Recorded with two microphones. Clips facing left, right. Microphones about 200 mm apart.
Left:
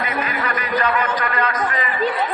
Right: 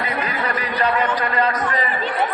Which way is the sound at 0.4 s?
30° right (ahead or behind).